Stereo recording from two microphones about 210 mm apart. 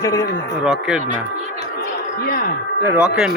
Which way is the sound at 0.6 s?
5° right (ahead or behind).